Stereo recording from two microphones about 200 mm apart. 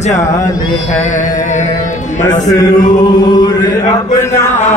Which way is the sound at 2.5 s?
20° left (ahead or behind).